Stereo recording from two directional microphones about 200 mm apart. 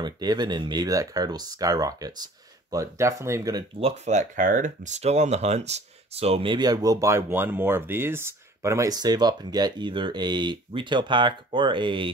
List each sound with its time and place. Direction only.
0.0 s speech: 20° right (ahead or behind)
3.8 s speech: 35° right (ahead or behind)